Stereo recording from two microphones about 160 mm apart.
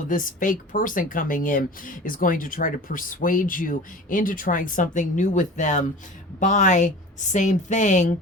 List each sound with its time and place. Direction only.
0.1 s a woman's voice: 55° left (ahead or behind)